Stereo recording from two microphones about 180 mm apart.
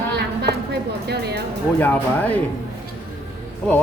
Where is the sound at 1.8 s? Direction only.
10° left (ahead or behind).